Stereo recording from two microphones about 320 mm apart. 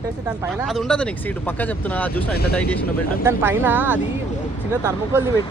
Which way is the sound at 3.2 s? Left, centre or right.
Centre.